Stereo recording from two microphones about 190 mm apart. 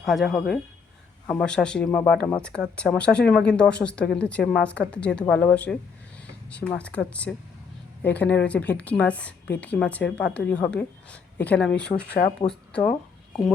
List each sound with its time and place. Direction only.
0.0 s a woman's voice: centre (ahead or behind)
12.0 s speech: 55° left (ahead or behind)